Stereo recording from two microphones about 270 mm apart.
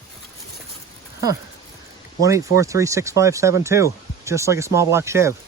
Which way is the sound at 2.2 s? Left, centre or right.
Centre.